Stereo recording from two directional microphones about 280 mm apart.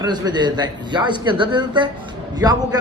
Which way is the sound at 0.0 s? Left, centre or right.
Centre.